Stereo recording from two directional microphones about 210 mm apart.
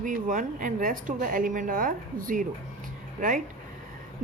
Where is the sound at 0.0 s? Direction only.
40° right (ahead or behind).